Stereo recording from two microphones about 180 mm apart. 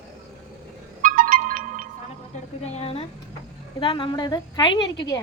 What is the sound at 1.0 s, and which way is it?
Music, 50° right (ahead or behind).